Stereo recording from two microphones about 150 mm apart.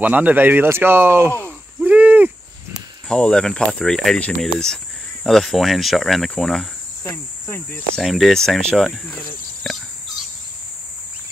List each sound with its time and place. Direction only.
0.0 s speech: 10° right (ahead or behind)
1.4 s a sound: 10° right (ahead or behind)
3.1 s speech: 5° left (ahead or behind)
7.1 s speech: 15° left (ahead or behind)
7.9 s speech: centre (ahead or behind)